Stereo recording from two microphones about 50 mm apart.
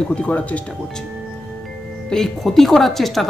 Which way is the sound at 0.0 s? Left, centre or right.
Centre.